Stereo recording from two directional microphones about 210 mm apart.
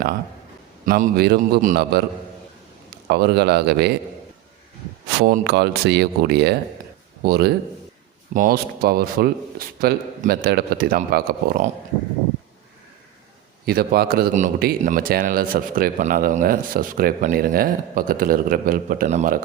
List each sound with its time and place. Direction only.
0.9 s a man's voice: 45° right (ahead or behind)
3.1 s a man's voice: 50° right (ahead or behind)
5.2 s a man's voice: 50° right (ahead or behind)
13.7 s a man's voice: 45° right (ahead or behind)